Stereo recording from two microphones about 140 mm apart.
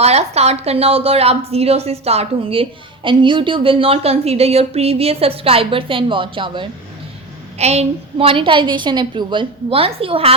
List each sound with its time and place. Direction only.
0.0 s a woman's voice: 50° right (ahead or behind)
7.6 s a woman's voice: 50° right (ahead or behind)